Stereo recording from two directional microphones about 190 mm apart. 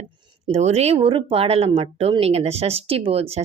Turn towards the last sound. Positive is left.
turn(degrees=-30)  # may be behind; listen again after turning